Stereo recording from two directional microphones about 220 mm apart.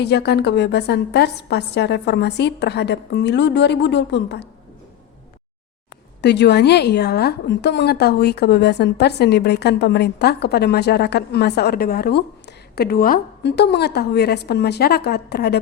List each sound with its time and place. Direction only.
0.0 s a woman's voice: 50° left (ahead or behind)
6.2 s a woman's voice: 50° left (ahead or behind)